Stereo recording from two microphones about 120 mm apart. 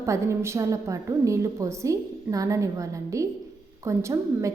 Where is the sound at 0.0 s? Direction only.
25° right (ahead or behind).